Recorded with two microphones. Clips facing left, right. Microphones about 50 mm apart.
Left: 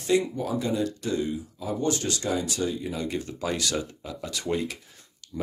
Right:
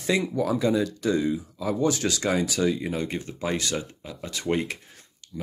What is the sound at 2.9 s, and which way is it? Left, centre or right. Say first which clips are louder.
Speech: right 1 dB; right.